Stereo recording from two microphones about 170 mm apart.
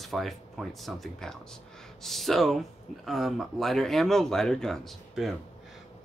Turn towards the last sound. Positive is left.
turn(degrees=0)  # may be behind; listen again after turning